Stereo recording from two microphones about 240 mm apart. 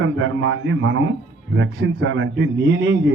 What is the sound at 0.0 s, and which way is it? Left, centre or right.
Speech, right.